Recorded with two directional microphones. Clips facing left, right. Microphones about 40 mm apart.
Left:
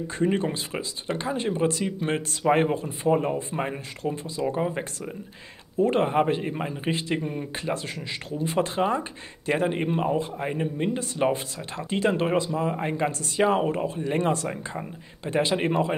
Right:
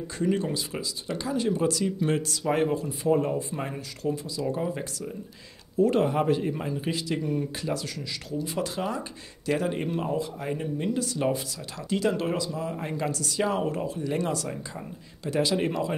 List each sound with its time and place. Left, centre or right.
0.2 s speech: left